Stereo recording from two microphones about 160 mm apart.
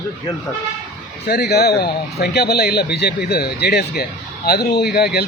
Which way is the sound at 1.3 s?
80° left.